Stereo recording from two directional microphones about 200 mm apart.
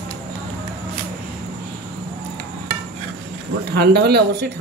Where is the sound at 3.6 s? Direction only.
55° right (ahead or behind).